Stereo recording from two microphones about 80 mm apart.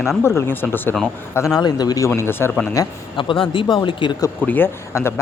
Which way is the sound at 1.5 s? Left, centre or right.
Left.